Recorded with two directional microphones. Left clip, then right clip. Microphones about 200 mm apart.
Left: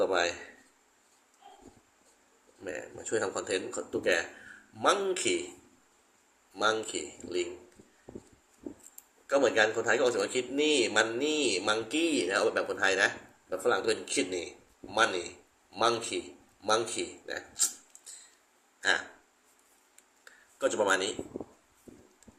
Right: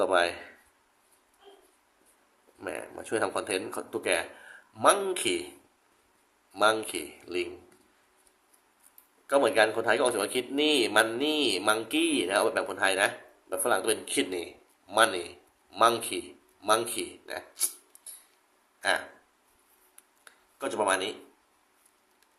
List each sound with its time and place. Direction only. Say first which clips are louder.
0.0 s a man's voice: right 3 dB; 25° right (ahead or behind)
2.6 s a man's voice: right 2 dB; 25° right (ahead or behind)
6.5 s a man's voice: right 4 dB; 20° right (ahead or behind)
9.2 s a man's voice: right 2 dB; 20° right (ahead or behind)
18.8 s speech: right 1 dB; 15° right (ahead or behind)
20.2 s a sound: left 4 dB; 15° right (ahead or behind)